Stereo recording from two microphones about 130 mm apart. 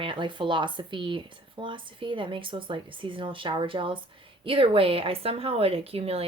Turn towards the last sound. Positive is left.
turn(degrees=-50)  # may be behind; listen again after turning